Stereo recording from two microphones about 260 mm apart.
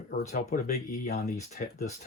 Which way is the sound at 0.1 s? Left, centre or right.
Left.